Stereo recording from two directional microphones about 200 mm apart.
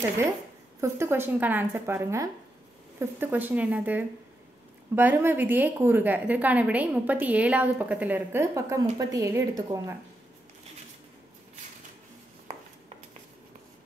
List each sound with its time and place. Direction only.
0.7 s a woman's voice: 15° right (ahead or behind)